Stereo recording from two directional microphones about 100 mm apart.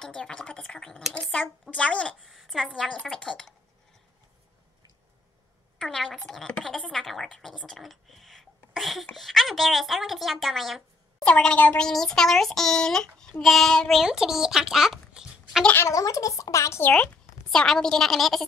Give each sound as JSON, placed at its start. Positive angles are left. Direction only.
{"t": 0.0, "sound": "speech", "side_deg": 10}
{"t": 2.2, "sound": "a child's voice", "side_deg": 0}
{"t": 5.8, "sound": "a child's voice", "side_deg": 5}
{"t": 15.6, "sound": "speech", "side_deg": 20}
{"t": 15.9, "sound": "speech", "side_deg": 35}
{"t": 16.8, "sound": "a woman's voice", "side_deg": 10}